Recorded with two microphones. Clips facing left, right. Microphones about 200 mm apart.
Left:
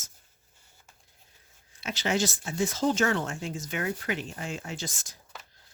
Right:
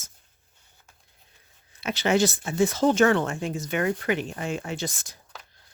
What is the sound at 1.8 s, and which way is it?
Speech, 60° right (ahead or behind).